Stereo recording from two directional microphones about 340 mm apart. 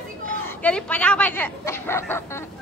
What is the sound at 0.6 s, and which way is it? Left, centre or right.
A woman's voice, centre.